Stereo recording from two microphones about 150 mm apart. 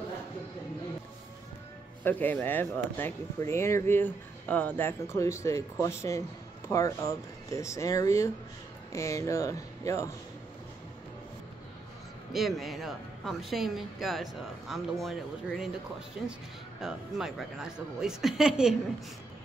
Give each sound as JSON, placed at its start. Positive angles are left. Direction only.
{"t": 2.0, "sound": "speech", "side_deg": 10}
{"t": 12.3, "sound": "speech", "side_deg": 0}
{"t": 16.8, "sound": "speech", "side_deg": -5}